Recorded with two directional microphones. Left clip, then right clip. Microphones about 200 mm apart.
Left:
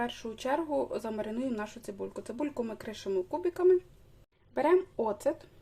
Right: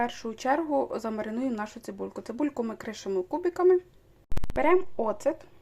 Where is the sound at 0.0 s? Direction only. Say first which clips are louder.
Right 5 dB; 20° right (ahead or behind).